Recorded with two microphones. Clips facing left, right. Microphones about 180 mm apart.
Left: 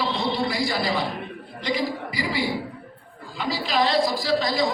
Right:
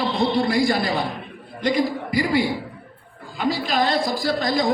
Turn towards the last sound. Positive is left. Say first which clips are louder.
# right 2 dB
turn(degrees=-50)  # may be behind; listen again after turning